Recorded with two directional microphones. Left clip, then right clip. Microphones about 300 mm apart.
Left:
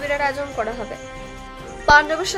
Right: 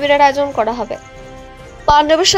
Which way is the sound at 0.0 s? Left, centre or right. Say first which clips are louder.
Right 11 dB; right.